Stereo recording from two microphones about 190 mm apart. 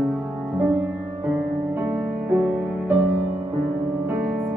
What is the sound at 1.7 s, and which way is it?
Music, 5° right (ahead or behind).